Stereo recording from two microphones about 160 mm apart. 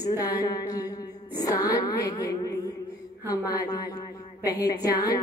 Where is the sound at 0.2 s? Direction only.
25° left (ahead or behind).